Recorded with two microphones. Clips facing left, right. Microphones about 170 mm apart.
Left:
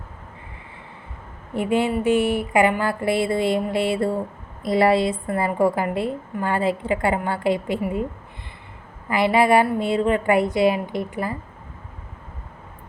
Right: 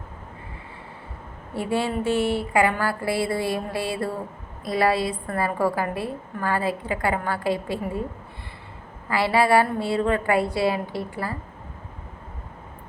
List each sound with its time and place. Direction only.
1.5 s a woman's voice: 20° left (ahead or behind)
9.0 s a woman's voice: 20° left (ahead or behind)